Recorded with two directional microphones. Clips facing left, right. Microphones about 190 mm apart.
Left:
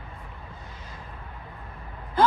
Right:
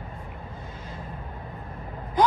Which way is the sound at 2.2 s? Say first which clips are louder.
Even; 15° right (ahead or behind).